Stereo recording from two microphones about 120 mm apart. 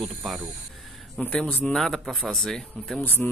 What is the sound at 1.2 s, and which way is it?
Speech, 10° left (ahead or behind).